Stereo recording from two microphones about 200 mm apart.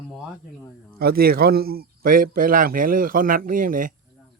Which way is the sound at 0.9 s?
50° right (ahead or behind).